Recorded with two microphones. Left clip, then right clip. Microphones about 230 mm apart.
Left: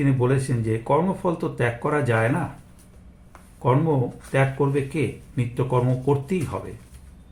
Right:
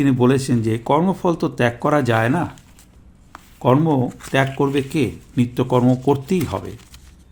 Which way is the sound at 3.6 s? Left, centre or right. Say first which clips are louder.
Right 5 dB; right.